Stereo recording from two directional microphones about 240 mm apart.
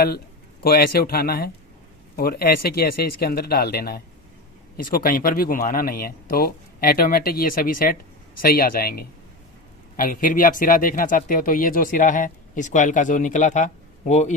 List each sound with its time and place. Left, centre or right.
0.6 s speech: left